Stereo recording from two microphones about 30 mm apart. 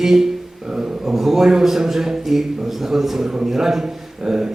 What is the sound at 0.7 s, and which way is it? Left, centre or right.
Speech, right.